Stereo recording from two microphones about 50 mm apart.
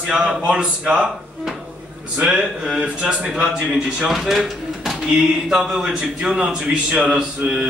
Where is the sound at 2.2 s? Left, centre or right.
Centre.